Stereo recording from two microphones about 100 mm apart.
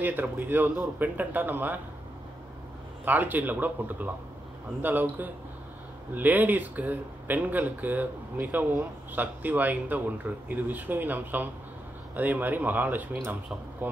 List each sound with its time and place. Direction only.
0.0 s speech: 20° right (ahead or behind)
3.1 s a man's voice: 20° right (ahead or behind)